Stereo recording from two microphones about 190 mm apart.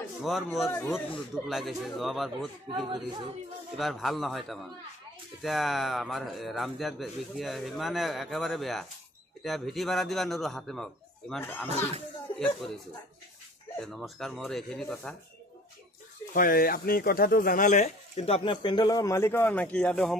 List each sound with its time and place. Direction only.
0.2 s speech: centre (ahead or behind)
2.9 s speech: 25° right (ahead or behind)
3.7 s speech: centre (ahead or behind)
13.7 s speech: centre (ahead or behind)
16.3 s speech: 50° left (ahead or behind); by 20.2 s 5° left (ahead or behind)